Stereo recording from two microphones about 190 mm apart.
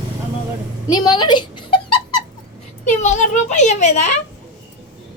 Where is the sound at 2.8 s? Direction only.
40° left (ahead or behind).